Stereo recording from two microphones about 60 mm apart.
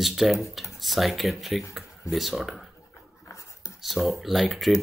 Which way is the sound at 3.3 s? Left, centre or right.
Left.